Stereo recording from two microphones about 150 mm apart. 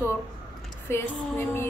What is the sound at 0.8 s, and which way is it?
Speech, 15° left (ahead or behind).